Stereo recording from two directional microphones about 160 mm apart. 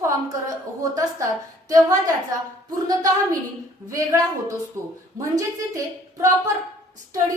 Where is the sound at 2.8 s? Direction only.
25° right (ahead or behind).